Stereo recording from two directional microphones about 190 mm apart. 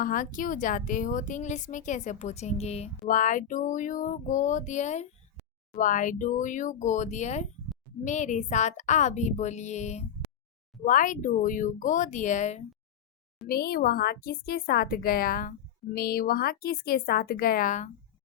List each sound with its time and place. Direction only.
0.0 s a woman's voice: 45° left (ahead or behind)
13.5 s speech: 55° left (ahead or behind)